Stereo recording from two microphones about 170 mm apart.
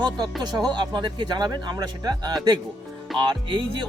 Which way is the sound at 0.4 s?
25° right (ahead or behind).